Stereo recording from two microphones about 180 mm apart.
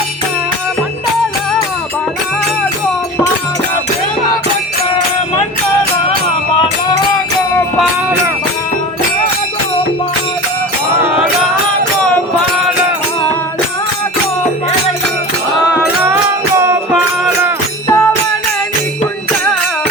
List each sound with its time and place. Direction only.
17.8 s music: 15° left (ahead or behind)